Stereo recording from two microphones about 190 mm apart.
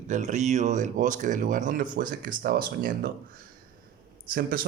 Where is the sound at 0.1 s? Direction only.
40° right (ahead or behind).